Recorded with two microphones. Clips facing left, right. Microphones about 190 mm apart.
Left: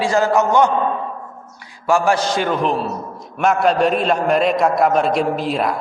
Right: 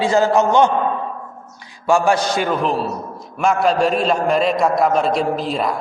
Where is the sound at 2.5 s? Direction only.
Centre (ahead or behind).